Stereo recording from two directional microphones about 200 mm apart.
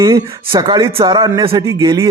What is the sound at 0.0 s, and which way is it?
A man's voice, 15° right (ahead or behind).